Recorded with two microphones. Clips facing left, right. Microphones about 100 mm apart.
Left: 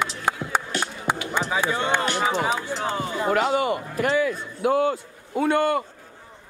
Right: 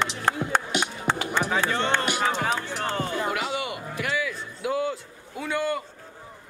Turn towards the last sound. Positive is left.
turn(degrees=55)  # may be behind; listen again after turning